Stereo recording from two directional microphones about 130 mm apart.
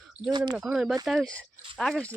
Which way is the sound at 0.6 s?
5° right (ahead or behind).